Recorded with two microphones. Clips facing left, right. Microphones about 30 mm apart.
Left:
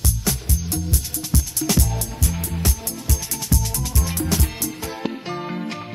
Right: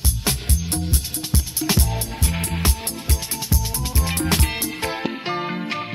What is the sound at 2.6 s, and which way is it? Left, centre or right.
Music, right.